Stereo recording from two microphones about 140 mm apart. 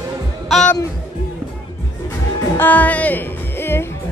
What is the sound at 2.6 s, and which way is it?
Speech, 10° left (ahead or behind).